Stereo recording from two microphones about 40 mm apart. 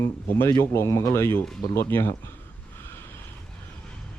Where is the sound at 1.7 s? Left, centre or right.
Left.